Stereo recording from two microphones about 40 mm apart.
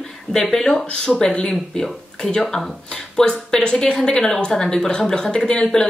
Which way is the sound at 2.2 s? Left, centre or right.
Left.